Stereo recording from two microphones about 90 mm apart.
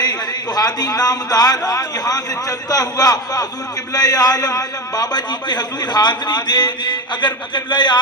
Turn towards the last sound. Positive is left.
turn(degrees=55)  # may be behind; listen again after turning